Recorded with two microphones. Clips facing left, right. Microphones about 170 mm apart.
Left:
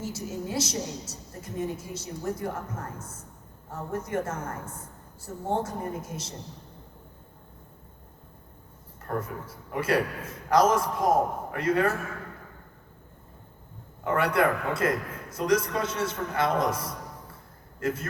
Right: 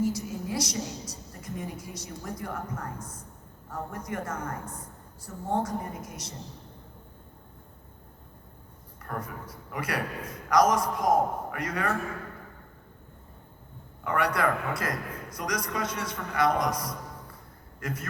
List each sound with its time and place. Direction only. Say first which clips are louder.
0.0 s a man's voice: right 4 dB; 25° left (ahead or behind)
3.7 s a man's voice: left 4 dB; 25° left (ahead or behind)
9.0 s a man's voice: left 4 dB; 30° left (ahead or behind)
14.0 s a man's voice: left 3 dB; 30° left (ahead or behind)